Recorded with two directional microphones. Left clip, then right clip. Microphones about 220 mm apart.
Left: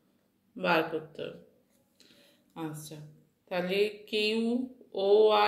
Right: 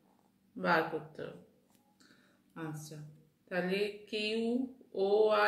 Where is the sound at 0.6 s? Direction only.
10° left (ahead or behind).